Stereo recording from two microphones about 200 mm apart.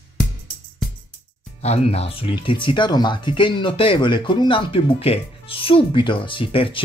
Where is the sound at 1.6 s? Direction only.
30° left (ahead or behind).